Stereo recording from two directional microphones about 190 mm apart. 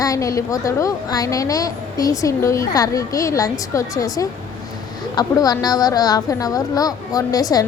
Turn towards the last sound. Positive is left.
turn(degrees=20)  # may be behind; listen again after turning